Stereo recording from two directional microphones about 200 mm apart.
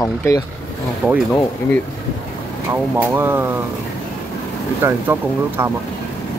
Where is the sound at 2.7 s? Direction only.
10° right (ahead or behind).